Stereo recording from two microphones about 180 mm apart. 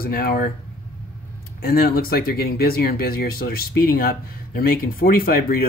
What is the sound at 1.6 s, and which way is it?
Speech, 55° left (ahead or behind).